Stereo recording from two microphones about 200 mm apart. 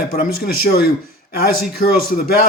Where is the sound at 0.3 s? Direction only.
50° left (ahead or behind).